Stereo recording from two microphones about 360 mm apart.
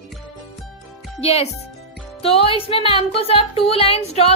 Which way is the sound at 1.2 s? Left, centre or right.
Centre.